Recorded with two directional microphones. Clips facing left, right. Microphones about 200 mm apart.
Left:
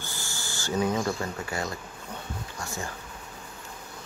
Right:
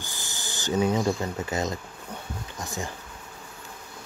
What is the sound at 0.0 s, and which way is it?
Speech, 15° right (ahead or behind).